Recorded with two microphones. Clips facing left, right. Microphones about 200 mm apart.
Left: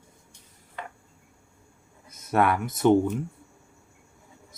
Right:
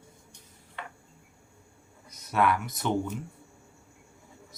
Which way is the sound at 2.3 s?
50° left (ahead or behind).